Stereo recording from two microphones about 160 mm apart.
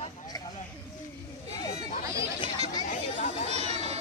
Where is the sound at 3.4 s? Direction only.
45° right (ahead or behind).